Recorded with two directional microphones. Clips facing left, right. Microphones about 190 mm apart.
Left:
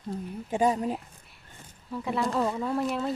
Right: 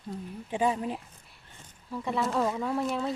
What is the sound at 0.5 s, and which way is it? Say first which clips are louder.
Speech: left 3 dB; 40° left (ahead or behind).